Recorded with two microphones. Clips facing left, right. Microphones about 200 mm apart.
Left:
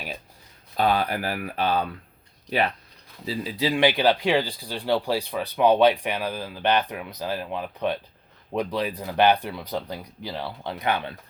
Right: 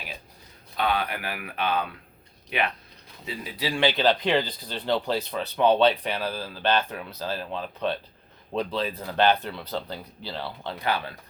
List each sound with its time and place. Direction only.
0.8 s speech: 40° left (ahead or behind)
3.2 s speech: 25° left (ahead or behind)